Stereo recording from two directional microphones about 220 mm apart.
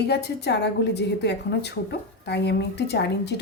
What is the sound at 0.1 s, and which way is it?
A woman's voice, 50° left (ahead or behind).